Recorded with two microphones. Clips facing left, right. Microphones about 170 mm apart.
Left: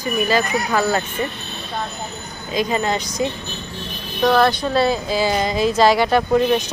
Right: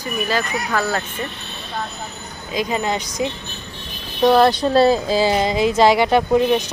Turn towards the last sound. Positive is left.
turn(degrees=-15)  # may be behind; listen again after turning